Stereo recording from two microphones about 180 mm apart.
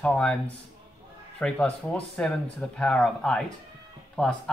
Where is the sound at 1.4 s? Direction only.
5° left (ahead or behind).